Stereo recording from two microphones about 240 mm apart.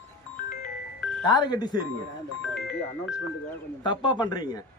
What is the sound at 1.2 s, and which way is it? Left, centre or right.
Speech, centre.